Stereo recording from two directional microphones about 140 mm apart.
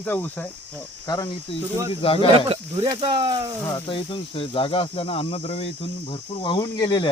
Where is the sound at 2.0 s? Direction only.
40° left (ahead or behind).